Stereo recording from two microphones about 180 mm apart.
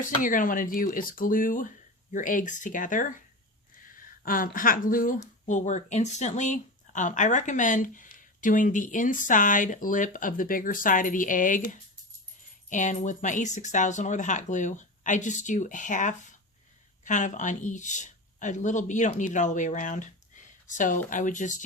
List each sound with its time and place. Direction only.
0.0 s a woman's voice: 45° left (ahead or behind)